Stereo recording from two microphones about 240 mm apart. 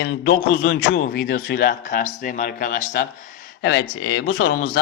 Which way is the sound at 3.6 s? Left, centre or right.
Left.